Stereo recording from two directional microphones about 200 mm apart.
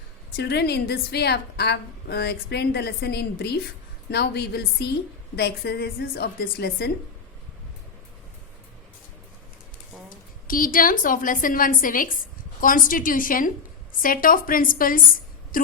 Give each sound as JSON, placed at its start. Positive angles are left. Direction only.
{"t": 0.3, "sound": "a woman's voice", "side_deg": 55}
{"t": 10.4, "sound": "a woman's voice", "side_deg": 45}